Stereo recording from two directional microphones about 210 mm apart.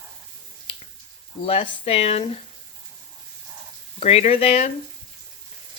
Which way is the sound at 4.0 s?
30° left (ahead or behind).